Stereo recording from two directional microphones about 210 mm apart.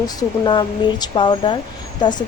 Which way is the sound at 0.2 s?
20° left (ahead or behind).